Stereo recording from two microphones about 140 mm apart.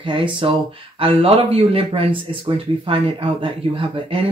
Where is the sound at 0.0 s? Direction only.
35° right (ahead or behind).